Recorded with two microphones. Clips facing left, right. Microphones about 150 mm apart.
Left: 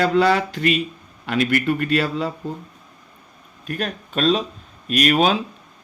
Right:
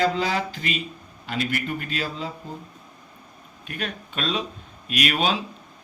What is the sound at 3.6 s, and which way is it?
Speech, 40° left (ahead or behind).